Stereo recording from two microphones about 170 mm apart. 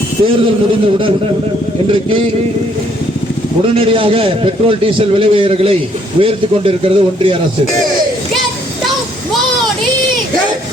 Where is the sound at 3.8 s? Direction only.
30° right (ahead or behind).